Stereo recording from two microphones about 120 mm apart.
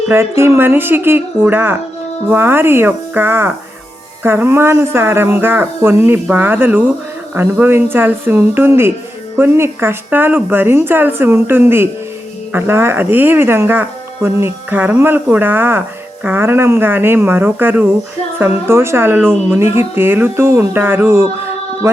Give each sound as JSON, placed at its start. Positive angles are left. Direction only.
{"t": 0.1, "sound": "speech", "side_deg": -20}